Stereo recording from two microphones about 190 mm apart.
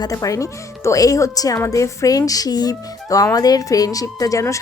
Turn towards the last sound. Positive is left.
turn(degrees=15)  # may be behind; listen again after turning